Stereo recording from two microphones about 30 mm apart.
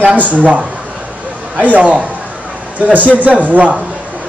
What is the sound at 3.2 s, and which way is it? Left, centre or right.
Speech, right.